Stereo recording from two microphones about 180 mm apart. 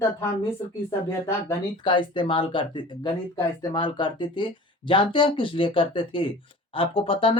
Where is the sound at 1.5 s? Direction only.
25° left (ahead or behind).